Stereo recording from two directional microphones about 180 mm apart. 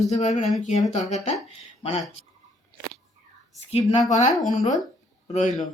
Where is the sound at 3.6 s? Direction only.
35° left (ahead or behind).